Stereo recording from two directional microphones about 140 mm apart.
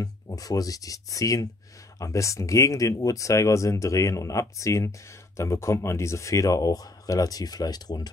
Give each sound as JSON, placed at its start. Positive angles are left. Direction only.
{"t": 0.0, "sound": "speech", "side_deg": 25}